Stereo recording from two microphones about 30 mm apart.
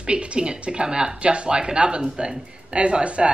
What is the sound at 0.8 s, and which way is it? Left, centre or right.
Speech, right.